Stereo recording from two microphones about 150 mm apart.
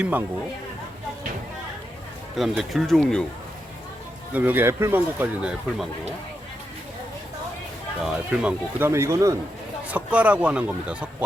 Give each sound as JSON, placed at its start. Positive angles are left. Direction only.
{"t": 0.0, "sound": "speech", "side_deg": -10}
{"t": 2.3, "sound": "speech", "side_deg": 0}
{"t": 4.3, "sound": "speech", "side_deg": -10}
{"t": 8.0, "sound": "speech", "side_deg": -5}
{"t": 9.9, "sound": "speech", "side_deg": -10}